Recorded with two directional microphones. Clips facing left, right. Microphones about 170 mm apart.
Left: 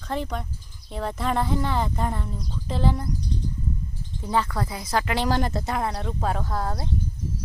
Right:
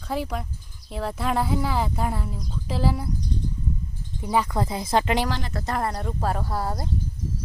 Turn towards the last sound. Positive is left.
turn(degrees=-10)  # may be behind; listen again after turning